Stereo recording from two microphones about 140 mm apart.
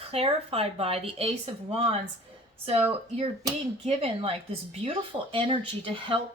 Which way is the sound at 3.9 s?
45° right (ahead or behind).